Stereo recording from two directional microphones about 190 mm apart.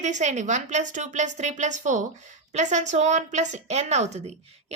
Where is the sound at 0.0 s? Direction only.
40° right (ahead or behind).